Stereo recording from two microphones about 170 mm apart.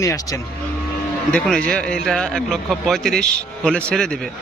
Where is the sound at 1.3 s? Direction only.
5° left (ahead or behind).